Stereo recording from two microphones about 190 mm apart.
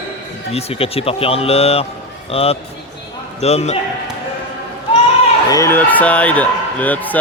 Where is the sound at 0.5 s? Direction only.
30° left (ahead or behind).